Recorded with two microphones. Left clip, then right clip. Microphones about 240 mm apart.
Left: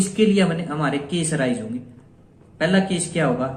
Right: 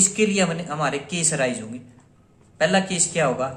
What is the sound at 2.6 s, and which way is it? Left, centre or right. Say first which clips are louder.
Speech: right 1 dB; right.